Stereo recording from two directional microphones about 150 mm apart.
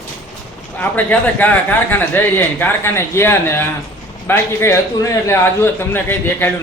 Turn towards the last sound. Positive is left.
turn(degrees=15)  # may be behind; listen again after turning